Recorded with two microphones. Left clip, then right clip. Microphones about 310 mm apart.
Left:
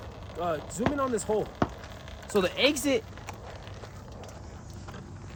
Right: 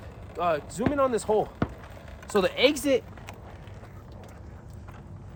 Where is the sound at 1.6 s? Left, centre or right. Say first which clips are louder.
Left 2 dB; centre.